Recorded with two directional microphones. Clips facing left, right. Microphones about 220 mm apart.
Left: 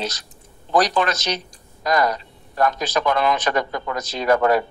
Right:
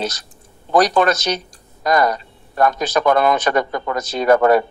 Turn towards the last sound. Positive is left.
turn(degrees=-50)  # may be behind; listen again after turning